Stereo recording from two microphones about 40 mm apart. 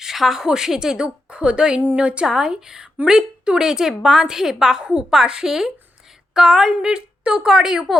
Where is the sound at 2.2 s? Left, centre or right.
Centre.